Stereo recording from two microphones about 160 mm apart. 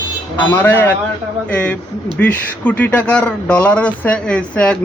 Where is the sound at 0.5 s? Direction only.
15° left (ahead or behind).